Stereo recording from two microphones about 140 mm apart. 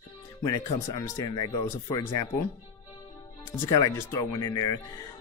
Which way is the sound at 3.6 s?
25° left (ahead or behind).